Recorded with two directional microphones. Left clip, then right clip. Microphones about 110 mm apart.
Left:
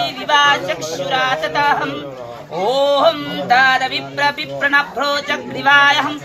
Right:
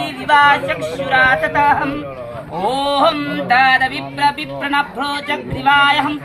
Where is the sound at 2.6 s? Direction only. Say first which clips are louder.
Left 1 dB; 60° left (ahead or behind).